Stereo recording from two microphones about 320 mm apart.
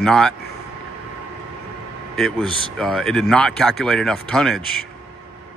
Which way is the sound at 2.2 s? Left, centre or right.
Centre.